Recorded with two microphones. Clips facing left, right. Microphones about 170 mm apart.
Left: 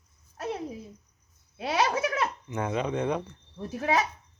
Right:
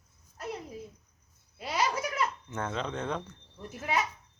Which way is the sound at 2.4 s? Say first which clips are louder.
Left 5 dB; 10° left (ahead or behind).